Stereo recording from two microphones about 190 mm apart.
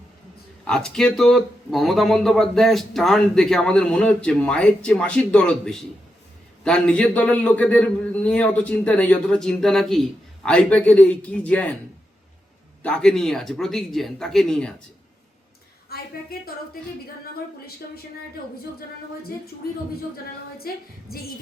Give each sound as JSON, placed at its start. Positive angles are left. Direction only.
{"t": 0.7, "sound": "a man's voice", "side_deg": 5}
{"t": 12.8, "sound": "speech", "side_deg": 5}
{"t": 15.9, "sound": "a woman's voice", "side_deg": 55}
{"t": 20.7, "sound": "a woman's voice", "side_deg": 50}